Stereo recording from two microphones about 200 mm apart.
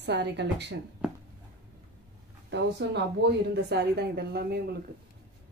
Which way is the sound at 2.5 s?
55° right (ahead or behind).